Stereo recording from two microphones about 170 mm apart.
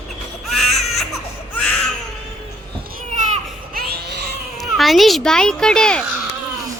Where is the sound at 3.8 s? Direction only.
70° right (ahead or behind).